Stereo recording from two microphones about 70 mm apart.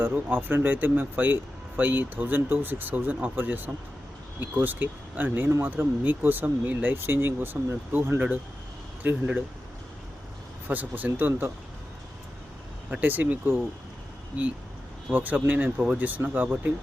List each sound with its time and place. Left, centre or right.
0.0 s speech: right
10.7 s speech: right
13.0 s speech: right